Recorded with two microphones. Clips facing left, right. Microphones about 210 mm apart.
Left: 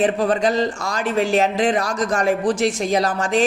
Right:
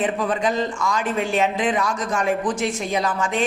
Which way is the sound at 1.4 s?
35° left (ahead or behind).